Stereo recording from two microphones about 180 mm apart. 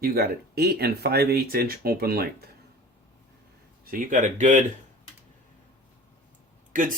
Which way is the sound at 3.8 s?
50° right (ahead or behind).